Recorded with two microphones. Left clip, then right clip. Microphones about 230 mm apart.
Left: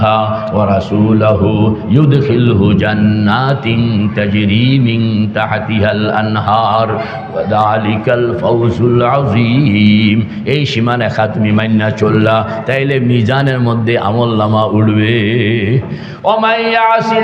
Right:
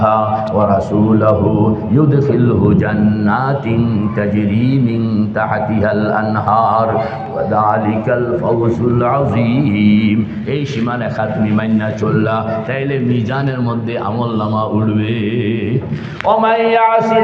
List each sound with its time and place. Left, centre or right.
6.5 s mantra: left
7.5 s a man's voice: left
12.0 s mantra: left
14.5 s mantra: left
16.2 s a man's voice: left